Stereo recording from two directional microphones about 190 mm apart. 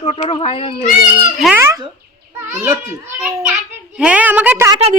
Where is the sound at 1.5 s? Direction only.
15° right (ahead or behind).